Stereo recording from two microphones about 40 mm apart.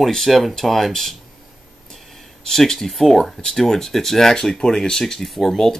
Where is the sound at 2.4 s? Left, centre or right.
Centre.